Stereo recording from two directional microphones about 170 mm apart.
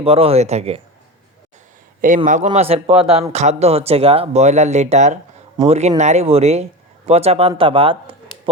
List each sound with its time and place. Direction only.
0.0 s speech: 35° right (ahead or behind)
2.0 s speech: 50° right (ahead or behind)
2.5 s speech: 35° right (ahead or behind)